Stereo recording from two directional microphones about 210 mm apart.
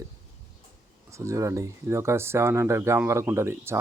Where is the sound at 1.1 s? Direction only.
15° right (ahead or behind).